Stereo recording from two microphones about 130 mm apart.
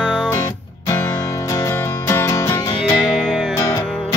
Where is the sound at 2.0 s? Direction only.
25° left (ahead or behind).